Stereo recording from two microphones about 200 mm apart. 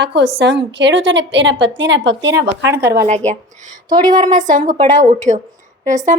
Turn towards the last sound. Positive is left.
turn(degrees=-35)  # may be behind; listen again after turning